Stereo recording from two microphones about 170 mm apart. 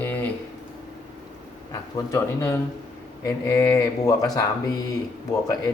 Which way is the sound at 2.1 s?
15° left (ahead or behind).